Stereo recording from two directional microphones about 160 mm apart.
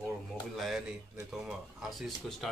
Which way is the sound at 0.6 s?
Centre (ahead or behind).